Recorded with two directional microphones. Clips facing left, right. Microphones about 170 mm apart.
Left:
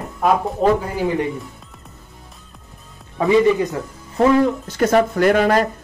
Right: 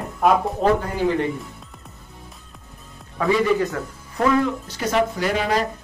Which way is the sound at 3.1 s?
20° left (ahead or behind).